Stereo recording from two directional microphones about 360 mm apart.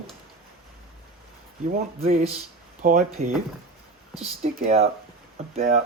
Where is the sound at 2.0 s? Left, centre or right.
Right.